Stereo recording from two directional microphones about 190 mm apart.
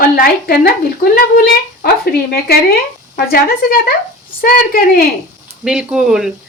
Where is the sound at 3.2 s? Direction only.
55° left (ahead or behind).